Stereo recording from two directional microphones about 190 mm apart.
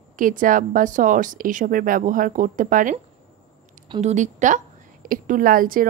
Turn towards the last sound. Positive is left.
turn(degrees=-50)  # may be behind; listen again after turning